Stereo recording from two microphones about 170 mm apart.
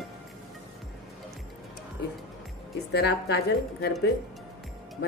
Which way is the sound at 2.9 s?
80° left.